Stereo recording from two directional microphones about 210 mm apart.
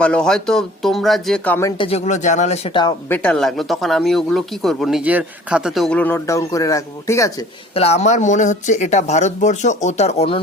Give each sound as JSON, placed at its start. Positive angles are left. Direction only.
{"t": 0.0, "sound": "speech", "side_deg": 5}
{"t": 1.8, "sound": "speech", "side_deg": 30}
{"t": 3.1, "sound": "speech", "side_deg": 5}
{"t": 7.7, "sound": "speech", "side_deg": 30}